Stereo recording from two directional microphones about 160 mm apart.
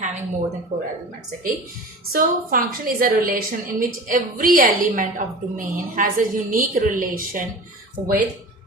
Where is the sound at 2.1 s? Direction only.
65° right (ahead or behind).